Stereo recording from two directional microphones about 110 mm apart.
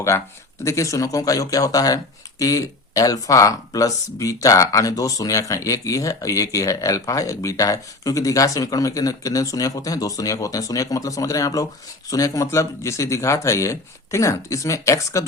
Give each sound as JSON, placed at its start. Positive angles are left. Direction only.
{"t": 0.6, "sound": "a man's voice", "side_deg": 25}